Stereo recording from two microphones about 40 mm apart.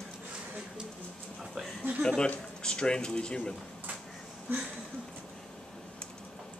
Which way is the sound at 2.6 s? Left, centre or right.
Left.